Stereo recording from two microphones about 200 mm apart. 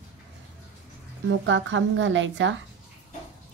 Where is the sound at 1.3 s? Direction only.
70° right (ahead or behind).